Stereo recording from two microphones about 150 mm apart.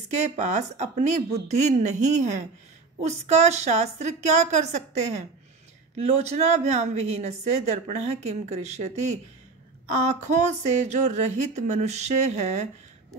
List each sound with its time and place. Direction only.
0.1 s a woman's voice: 50° right (ahead or behind)